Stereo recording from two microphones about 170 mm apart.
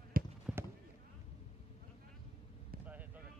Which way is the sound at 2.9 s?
10° right (ahead or behind).